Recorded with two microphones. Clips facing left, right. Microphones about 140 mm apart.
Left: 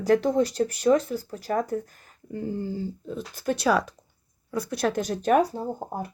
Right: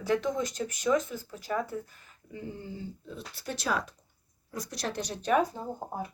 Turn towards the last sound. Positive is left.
turn(degrees=35)  # may be behind; listen again after turning